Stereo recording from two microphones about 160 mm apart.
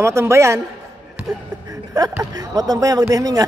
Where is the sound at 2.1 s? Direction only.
20° right (ahead or behind).